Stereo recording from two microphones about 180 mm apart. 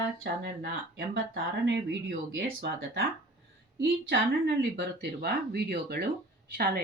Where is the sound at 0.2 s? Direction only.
70° right (ahead or behind); by 1.8 s 85° right.